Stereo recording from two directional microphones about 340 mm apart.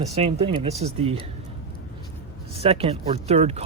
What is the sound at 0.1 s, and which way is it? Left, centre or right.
Speech, centre.